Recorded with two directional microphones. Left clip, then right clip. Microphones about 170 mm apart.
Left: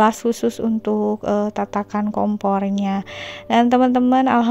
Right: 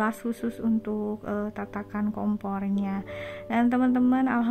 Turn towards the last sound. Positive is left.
turn(degrees=40)  # may be behind; listen again after turning